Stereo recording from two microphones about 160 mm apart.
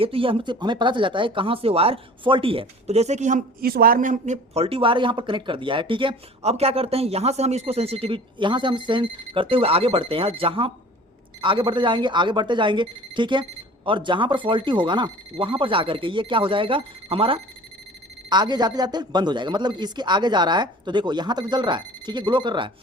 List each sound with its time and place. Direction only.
0.0 s speech: 35° right (ahead or behind)
3.6 s speech: 70° right (ahead or behind); by 22.7 s 30° right (ahead or behind)